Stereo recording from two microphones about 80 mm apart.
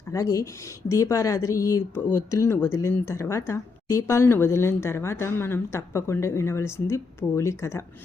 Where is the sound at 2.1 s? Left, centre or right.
Left.